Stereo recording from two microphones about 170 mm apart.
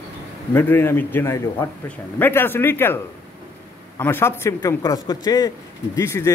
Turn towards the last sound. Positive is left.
turn(degrees=15)  # may be behind; listen again after turning